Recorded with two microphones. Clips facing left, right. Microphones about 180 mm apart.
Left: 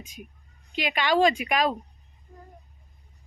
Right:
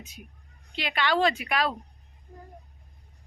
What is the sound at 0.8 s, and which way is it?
Speech, 15° left (ahead or behind).